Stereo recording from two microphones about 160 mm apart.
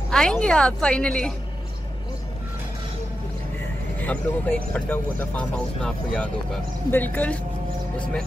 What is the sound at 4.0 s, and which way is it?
Speech, 10° left (ahead or behind).